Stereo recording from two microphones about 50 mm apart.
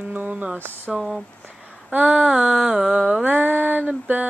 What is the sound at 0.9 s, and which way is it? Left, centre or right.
Speech, centre.